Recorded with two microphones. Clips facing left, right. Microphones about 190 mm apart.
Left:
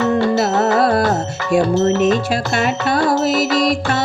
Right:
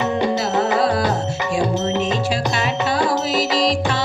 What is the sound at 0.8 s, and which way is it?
Music, 60° left (ahead or behind).